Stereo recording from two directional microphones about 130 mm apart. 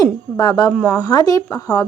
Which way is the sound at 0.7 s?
5° left (ahead or behind).